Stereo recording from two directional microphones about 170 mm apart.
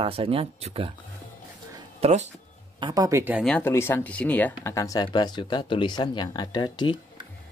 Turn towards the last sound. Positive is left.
turn(degrees=25)  # may be behind; listen again after turning